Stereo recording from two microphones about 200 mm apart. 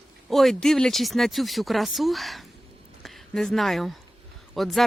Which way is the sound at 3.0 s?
Centre (ahead or behind).